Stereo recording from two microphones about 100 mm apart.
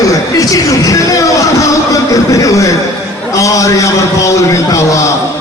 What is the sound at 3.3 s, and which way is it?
A man's voice, 35° left (ahead or behind).